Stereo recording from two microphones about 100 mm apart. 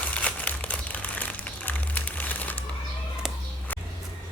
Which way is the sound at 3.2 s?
5° right (ahead or behind).